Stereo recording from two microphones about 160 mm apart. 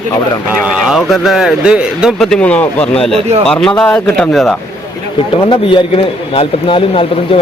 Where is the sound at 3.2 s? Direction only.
35° right (ahead or behind).